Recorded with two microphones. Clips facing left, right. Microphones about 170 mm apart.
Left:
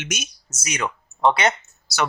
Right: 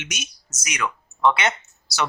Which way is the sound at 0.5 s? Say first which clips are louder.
Left 1 dB; 30° left (ahead or behind).